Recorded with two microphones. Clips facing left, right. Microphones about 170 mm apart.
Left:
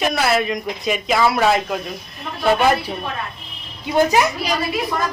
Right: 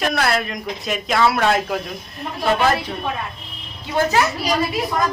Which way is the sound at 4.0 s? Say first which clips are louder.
Left 2 dB; 15° left (ahead or behind).